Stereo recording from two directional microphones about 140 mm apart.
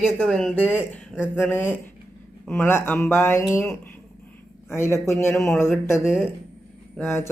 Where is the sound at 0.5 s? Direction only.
15° left (ahead or behind).